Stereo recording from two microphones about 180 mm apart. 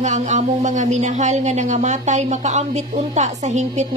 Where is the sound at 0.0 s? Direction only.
40° right (ahead or behind).